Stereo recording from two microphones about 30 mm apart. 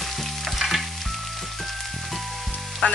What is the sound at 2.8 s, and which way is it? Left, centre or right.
Music, left.